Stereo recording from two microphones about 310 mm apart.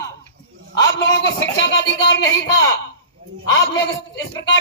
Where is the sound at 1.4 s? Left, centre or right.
Left.